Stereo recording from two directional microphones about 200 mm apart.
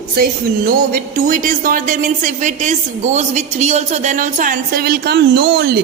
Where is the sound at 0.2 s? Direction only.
45° right (ahead or behind).